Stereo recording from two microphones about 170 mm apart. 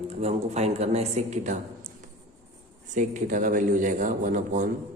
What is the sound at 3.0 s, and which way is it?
A man's voice, 50° right (ahead or behind).